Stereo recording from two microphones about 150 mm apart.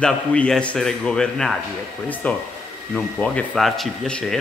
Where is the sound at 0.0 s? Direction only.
5° left (ahead or behind).